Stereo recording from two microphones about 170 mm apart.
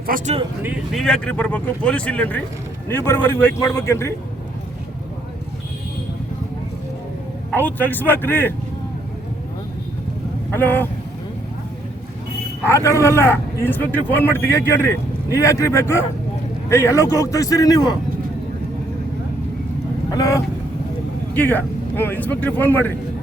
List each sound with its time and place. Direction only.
0.1 s speech: 55° right (ahead or behind)
0.6 s speech: 10° right (ahead or behind)
1.0 s a man's voice: 5° left (ahead or behind)
7.5 s a man's voice: 10° left (ahead or behind)
10.5 s a man's voice: 10° left (ahead or behind)
12.6 s a man's voice: 15° left (ahead or behind)
20.1 s vehicle: 20° left (ahead or behind)
21.3 s a man's voice: 10° left (ahead or behind)